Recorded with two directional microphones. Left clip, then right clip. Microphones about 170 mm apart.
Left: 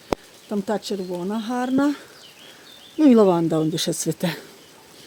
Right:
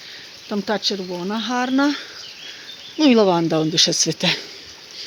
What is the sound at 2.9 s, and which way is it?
Speech, 15° left (ahead or behind).